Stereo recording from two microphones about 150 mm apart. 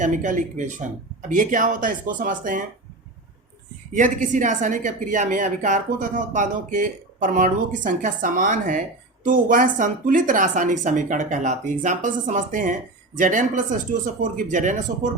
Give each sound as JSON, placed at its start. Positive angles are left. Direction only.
{"t": 0.0, "sound": "a woman's voice", "side_deg": -55}
{"t": 3.9, "sound": "a woman's voice", "side_deg": -55}